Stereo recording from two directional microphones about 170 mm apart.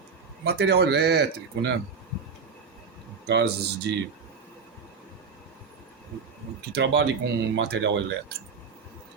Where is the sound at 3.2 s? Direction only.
80° right.